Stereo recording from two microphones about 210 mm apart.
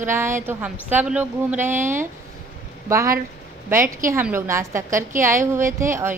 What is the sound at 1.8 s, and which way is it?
Speech, 35° right (ahead or behind).